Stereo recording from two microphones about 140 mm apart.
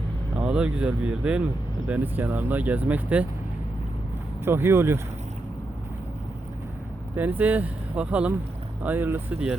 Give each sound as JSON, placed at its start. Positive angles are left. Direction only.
{"t": 0.3, "sound": "speech", "side_deg": -10}
{"t": 4.4, "sound": "speech", "side_deg": -15}
{"t": 7.2, "sound": "speech", "side_deg": -10}